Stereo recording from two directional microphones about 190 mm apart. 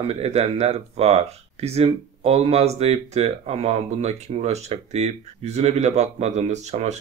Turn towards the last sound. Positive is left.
turn(degrees=-35)  # may be behind; listen again after turning